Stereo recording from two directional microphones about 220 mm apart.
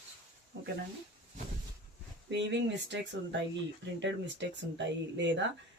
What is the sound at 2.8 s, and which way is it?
Speech, 55° right (ahead or behind).